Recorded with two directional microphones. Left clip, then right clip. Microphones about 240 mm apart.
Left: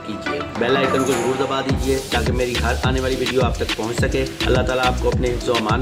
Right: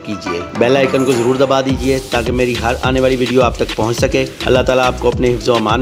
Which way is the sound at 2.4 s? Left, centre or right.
Right.